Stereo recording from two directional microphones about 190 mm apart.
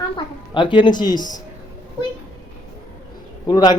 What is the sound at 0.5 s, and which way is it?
Speech, 25° left (ahead or behind).